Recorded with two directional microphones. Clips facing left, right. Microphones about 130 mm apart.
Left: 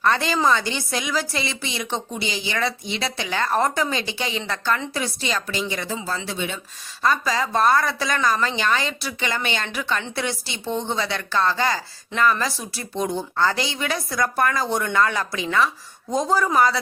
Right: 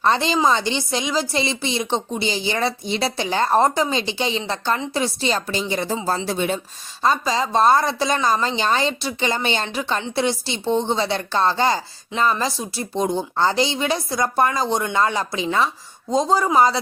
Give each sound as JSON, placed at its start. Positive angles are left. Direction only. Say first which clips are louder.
{"t": 0.0, "sound": "a woman's voice", "louder": "right 2 dB", "side_deg": -25}
{"t": 7.0, "sound": "a woman's voice", "louder": "right 2 dB", "side_deg": -25}